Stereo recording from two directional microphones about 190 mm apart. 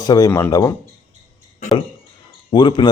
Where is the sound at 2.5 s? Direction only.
25° left (ahead or behind).